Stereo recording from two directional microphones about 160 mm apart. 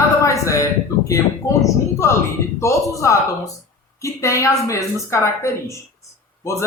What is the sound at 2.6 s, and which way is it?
Speech, 20° left (ahead or behind).